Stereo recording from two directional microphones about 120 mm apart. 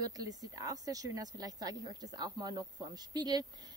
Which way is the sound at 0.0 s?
30° right (ahead or behind).